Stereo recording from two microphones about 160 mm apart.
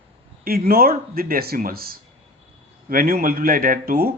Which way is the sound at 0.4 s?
65° right (ahead or behind).